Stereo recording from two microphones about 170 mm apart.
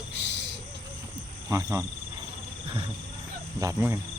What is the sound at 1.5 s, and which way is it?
Speech, 20° right (ahead or behind).